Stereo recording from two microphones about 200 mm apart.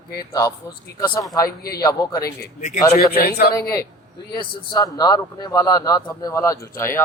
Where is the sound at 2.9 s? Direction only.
50° left (ahead or behind).